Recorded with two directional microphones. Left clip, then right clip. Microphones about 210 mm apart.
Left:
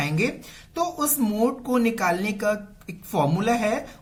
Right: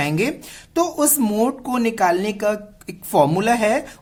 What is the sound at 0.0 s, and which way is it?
Speech, 50° right (ahead or behind).